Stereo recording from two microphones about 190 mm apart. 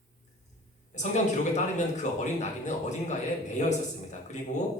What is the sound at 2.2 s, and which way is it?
A man's voice, 40° left (ahead or behind).